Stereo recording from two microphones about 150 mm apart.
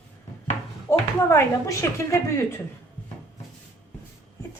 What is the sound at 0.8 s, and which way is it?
Speech, 20° left (ahead or behind).